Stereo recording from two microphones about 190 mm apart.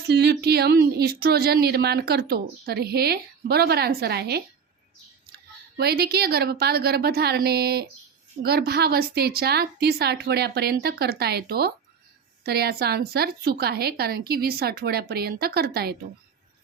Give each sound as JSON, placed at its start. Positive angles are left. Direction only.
{"t": 0.1, "sound": "a woman's voice", "side_deg": -60}
{"t": 5.7, "sound": "a woman's voice", "side_deg": -55}